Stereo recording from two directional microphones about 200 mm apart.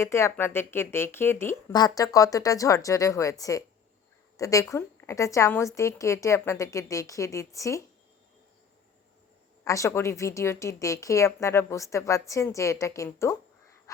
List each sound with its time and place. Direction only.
0.0 s speech: 15° left (ahead or behind)
9.6 s speech: 15° left (ahead or behind)